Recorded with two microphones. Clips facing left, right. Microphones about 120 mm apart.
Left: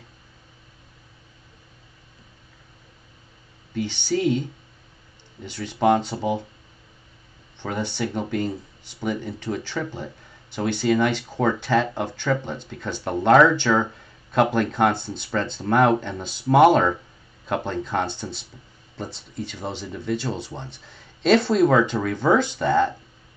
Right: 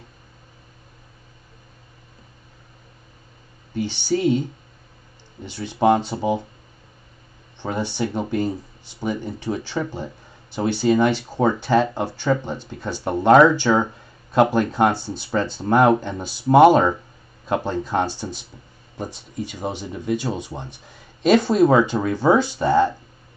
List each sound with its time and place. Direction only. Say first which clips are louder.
3.7 s speech: right 2 dB; 15° right (ahead or behind)
5.8 s speech: right 2 dB; 20° right (ahead or behind)
7.6 s speech: right 2 dB; 15° right (ahead or behind)